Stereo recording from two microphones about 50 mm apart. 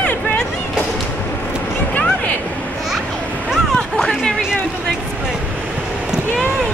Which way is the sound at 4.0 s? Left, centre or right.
Centre.